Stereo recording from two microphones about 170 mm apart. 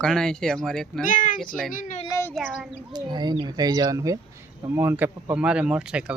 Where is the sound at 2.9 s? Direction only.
25° right (ahead or behind).